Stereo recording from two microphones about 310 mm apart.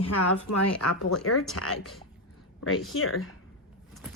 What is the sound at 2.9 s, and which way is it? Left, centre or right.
Speech, left.